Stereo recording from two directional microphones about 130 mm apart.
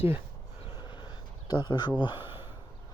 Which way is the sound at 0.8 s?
35° left (ahead or behind).